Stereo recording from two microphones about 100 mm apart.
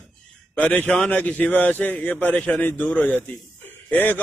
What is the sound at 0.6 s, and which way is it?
A man's voice, 15° left (ahead or behind).